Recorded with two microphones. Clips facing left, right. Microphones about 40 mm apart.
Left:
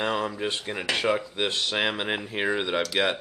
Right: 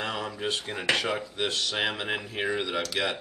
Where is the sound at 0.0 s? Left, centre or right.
Left.